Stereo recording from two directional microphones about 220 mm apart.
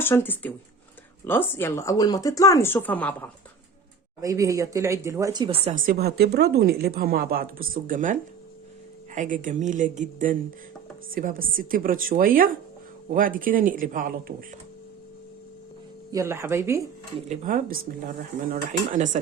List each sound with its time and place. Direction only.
0.0 s speech: 10° left (ahead or behind)
4.2 s speech: 15° right (ahead or behind)
5.7 s speech: 40° right (ahead or behind)
16.1 s speech: 10° right (ahead or behind)
17.2 s speech: 40° right (ahead or behind)